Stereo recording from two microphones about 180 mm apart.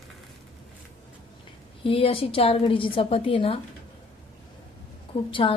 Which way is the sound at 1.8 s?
30° left (ahead or behind).